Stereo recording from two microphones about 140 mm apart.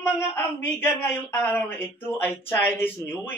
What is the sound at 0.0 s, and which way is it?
Speech, 15° left (ahead or behind).